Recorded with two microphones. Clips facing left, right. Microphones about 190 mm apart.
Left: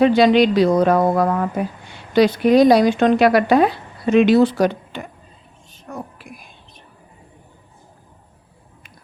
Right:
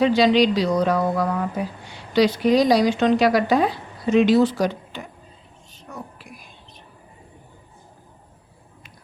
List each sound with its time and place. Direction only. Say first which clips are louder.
0.0 s speech: left 3 dB; 55° left (ahead or behind)
5.9 s whispering: left 5 dB; 50° left (ahead or behind)